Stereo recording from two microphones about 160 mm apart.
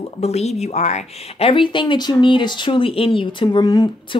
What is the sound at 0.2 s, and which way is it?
A woman's voice, 40° left (ahead or behind).